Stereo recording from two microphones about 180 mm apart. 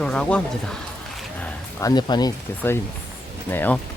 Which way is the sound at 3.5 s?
10° left (ahead or behind).